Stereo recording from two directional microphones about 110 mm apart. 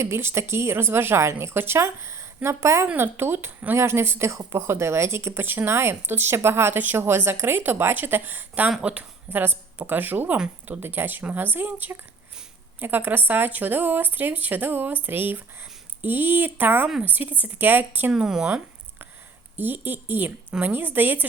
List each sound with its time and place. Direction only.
0.0 s a woman's voice: 25° right (ahead or behind)
18.1 s speech: 5° right (ahead or behind)